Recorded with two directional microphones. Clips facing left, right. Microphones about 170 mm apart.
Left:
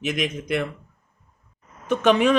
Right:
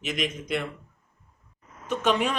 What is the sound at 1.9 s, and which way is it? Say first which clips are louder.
Speech: left 7 dB; 65° left (ahead or behind).